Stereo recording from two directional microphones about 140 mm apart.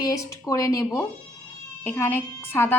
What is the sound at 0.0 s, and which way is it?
A woman's voice, 25° left (ahead or behind).